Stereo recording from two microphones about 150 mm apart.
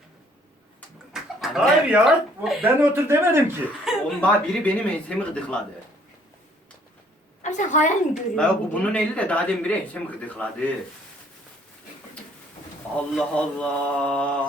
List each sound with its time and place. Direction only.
1.1 s speech: centre (ahead or behind)
2.9 s speech: 15° right (ahead or behind)
3.9 s chuckle: 5° right (ahead or behind)
4.2 s speech: 10° left (ahead or behind)
7.4 s a woman's voice: 55° left (ahead or behind)
8.1 s speech: 5° left (ahead or behind)
13.1 s speech: 5° left (ahead or behind)